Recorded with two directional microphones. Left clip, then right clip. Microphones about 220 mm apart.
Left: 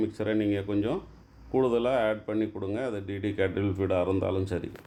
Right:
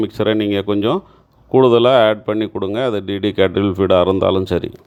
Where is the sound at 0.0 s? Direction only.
35° right (ahead or behind).